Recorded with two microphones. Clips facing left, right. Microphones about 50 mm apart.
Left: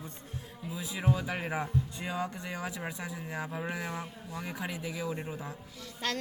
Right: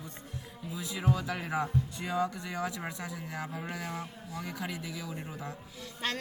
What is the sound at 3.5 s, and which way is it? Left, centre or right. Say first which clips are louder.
A man's voice: left 2 dB; left.